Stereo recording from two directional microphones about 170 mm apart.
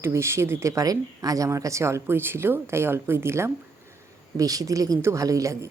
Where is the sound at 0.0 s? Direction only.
15° right (ahead or behind).